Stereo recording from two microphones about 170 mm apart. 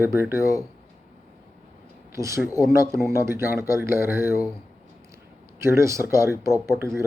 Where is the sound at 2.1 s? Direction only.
15° right (ahead or behind).